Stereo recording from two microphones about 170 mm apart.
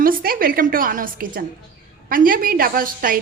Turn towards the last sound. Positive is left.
turn(degrees=-55)  # may be behind; listen again after turning